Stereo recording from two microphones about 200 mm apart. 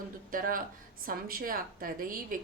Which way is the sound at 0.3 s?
45° right (ahead or behind).